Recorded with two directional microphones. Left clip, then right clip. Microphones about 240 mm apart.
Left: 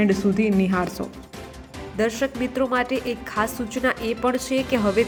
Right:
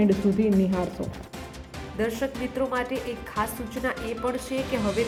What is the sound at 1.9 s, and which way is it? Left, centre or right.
A woman's voice, centre.